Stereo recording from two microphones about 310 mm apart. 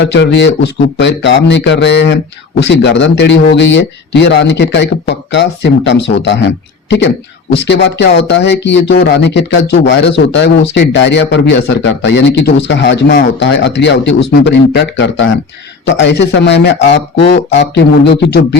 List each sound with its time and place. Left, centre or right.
0.1 s speech: left
7.5 s speech: left